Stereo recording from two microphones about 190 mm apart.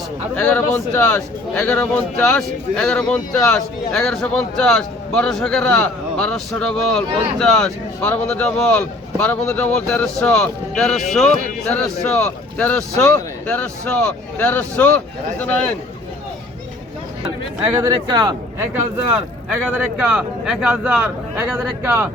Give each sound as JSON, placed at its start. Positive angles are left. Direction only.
{"t": 0.3, "sound": "speech", "side_deg": 10}
{"t": 17.7, "sound": "speech", "side_deg": -20}
{"t": 18.7, "sound": "speech", "side_deg": -10}